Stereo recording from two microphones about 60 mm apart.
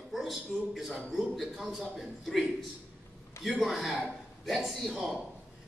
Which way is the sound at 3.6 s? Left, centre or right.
Centre.